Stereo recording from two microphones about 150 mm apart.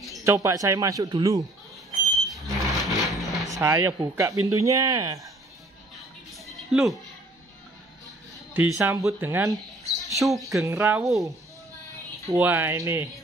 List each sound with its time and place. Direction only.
0.2 s speech: 20° right (ahead or behind)
2.0 s a sound: centre (ahead or behind)
3.5 s speech: 15° right (ahead or behind)
6.3 s music: centre (ahead or behind)
8.5 s speech: 15° right (ahead or behind)
9.8 s speech: centre (ahead or behind)
10.6 s speech: 15° right (ahead or behind)
12.3 s speech: 15° right (ahead or behind)